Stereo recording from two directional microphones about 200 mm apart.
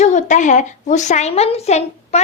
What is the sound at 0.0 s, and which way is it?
A woman's voice, 35° left (ahead or behind).